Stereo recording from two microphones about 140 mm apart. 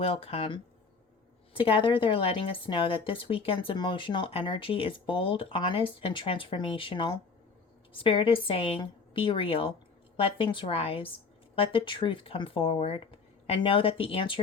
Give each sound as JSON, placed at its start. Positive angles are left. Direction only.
{"t": 0.0, "sound": "a woman's voice", "side_deg": 45}